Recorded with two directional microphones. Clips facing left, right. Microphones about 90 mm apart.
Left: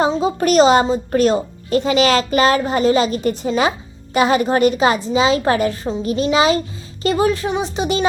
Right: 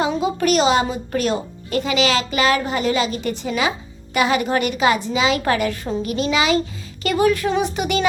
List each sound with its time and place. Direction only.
0.1 s speech: 30° left (ahead or behind)